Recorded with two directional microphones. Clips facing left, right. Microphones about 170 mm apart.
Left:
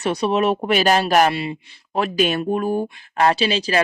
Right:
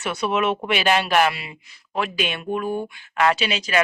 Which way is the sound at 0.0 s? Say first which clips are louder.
Left 4 dB; 35° left (ahead or behind).